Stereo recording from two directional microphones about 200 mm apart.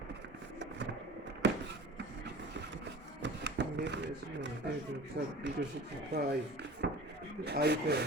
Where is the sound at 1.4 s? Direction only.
60° right (ahead or behind).